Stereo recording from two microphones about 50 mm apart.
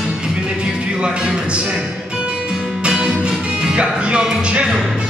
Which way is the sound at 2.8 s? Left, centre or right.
Centre.